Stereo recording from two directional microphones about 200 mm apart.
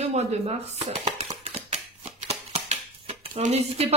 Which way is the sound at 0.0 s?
35° right (ahead or behind).